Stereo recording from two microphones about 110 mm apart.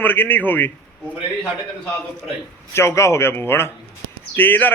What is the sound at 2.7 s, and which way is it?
A man's voice, 25° left (ahead or behind).